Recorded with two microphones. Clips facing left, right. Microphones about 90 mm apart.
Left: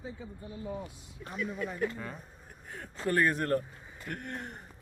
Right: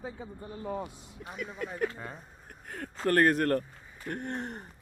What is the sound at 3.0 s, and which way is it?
Speech, 60° right (ahead or behind).